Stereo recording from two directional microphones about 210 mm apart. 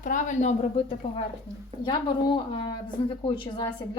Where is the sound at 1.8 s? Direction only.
20° left (ahead or behind).